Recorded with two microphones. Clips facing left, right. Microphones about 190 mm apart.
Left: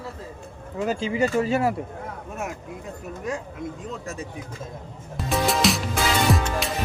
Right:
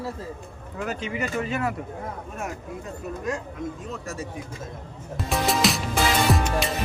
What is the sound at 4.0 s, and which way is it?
Speech, 15° left (ahead or behind).